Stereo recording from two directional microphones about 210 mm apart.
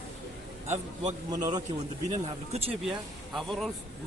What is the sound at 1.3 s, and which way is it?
Speech, 20° right (ahead or behind).